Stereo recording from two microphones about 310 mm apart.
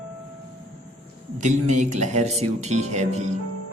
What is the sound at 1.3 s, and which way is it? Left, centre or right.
Speech, right.